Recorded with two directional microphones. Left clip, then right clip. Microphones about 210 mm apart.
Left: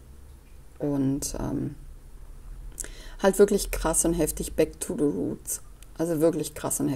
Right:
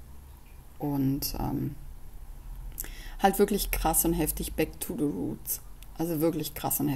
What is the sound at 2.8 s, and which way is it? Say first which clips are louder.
A woman's voice: left 1 dB; 5° left (ahead or behind).